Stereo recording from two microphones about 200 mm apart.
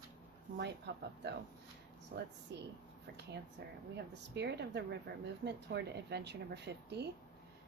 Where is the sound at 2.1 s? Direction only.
50° right (ahead or behind).